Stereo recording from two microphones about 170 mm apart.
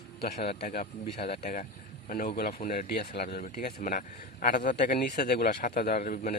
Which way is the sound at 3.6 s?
55° left (ahead or behind).